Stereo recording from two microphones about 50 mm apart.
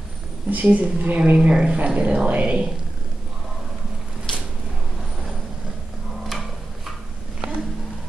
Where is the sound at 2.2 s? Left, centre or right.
Right.